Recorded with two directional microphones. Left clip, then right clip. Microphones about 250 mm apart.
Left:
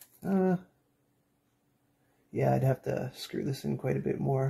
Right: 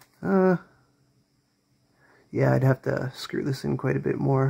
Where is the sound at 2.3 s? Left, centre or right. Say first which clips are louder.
Right 5 dB; right.